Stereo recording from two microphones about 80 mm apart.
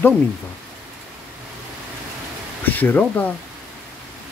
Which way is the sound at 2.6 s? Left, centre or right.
Left.